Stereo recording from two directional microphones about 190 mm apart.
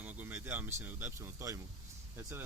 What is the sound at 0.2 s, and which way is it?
Speech, 10° right (ahead or behind).